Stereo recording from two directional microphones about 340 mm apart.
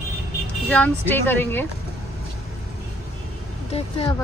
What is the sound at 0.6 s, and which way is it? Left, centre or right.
Speech, centre.